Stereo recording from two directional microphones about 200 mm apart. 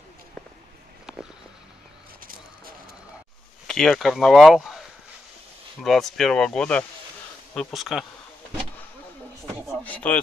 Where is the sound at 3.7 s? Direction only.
Centre (ahead or behind).